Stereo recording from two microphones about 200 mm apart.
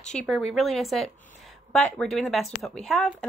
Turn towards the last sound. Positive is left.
turn(degrees=0)  # may be behind; listen again after turning